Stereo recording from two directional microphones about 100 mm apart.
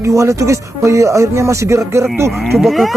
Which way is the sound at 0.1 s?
30° right (ahead or behind).